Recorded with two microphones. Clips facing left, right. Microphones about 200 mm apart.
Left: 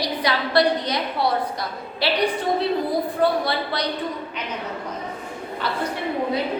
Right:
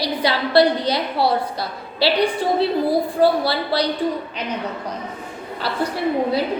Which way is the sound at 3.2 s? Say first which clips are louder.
Right 3 dB; 30° right (ahead or behind).